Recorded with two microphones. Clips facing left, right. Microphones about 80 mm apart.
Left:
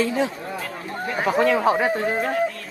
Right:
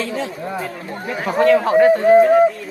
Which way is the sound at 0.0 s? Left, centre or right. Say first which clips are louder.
Left 2 dB; centre.